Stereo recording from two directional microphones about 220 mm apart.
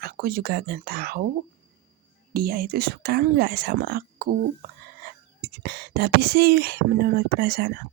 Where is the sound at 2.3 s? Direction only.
45° right (ahead or behind).